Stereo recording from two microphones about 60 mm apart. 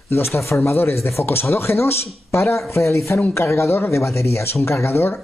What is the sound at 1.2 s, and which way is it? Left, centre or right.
Speech, left.